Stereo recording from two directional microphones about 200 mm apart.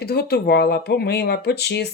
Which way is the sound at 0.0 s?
50° left (ahead or behind).